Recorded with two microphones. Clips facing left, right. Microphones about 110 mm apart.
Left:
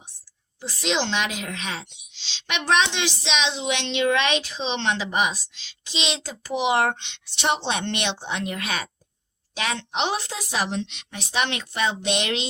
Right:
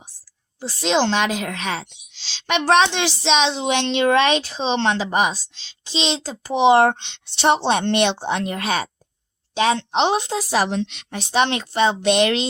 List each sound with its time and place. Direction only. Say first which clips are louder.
0.6 s a woman's voice: right 6 dB; 30° right (ahead or behind)
10.7 s a woman's voice: right 5 dB; 50° right (ahead or behind)
11.2 s speech: right 7 dB; 30° right (ahead or behind)